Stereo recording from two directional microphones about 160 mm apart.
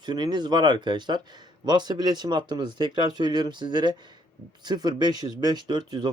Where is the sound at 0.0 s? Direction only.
25° right (ahead or behind).